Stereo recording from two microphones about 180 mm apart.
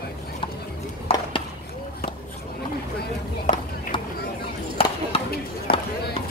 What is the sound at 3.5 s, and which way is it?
Run, 45° left (ahead or behind).